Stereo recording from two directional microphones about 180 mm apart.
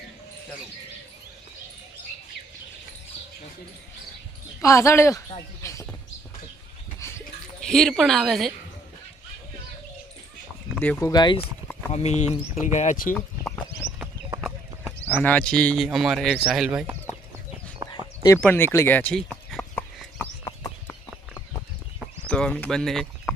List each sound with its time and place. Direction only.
4.6 s speech: 15° left (ahead or behind)
5.6 s a sound: 15° left (ahead or behind)
7.0 s dog: 15° left (ahead or behind)
7.6 s speech: centre (ahead or behind)
10.8 s speech: 10° left (ahead or behind)
11.1 s speech: 25° left (ahead or behind)
11.9 s speech: 40° left (ahead or behind)
15.0 s speech: 10° left (ahead or behind); by 17.2 s 5° right (ahead or behind)
17.8 s chicken: 20° right (ahead or behind)
18.3 s a sound: 10° left (ahead or behind)
22.3 s speech: 5° left (ahead or behind)